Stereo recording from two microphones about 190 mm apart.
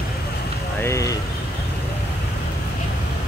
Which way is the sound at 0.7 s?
15° left (ahead or behind).